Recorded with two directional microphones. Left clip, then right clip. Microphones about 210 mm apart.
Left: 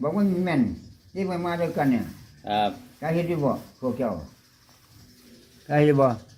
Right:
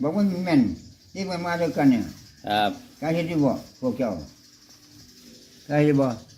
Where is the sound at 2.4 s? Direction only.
30° right (ahead or behind).